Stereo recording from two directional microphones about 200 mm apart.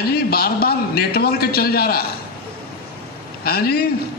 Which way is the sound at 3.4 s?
50° left (ahead or behind).